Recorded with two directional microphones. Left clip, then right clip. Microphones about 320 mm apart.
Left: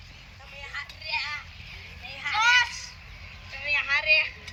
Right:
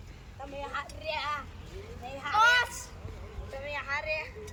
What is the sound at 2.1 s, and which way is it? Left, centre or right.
Children playing, right.